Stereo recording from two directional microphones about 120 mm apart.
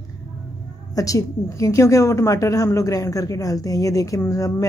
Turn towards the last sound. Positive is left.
turn(degrees=25)  # may be behind; listen again after turning